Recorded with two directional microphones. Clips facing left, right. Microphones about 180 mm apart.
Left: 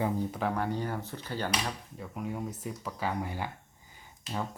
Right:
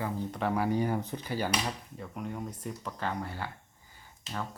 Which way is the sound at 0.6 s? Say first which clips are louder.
Right 4 dB; 15° right (ahead or behind).